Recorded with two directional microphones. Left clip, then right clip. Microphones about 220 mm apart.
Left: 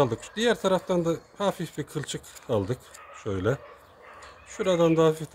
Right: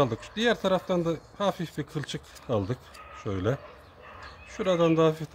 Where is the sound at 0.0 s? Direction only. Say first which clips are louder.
Left 1 dB; 15° left (ahead or behind).